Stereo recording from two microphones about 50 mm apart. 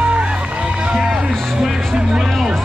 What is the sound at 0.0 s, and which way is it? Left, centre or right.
Run, right.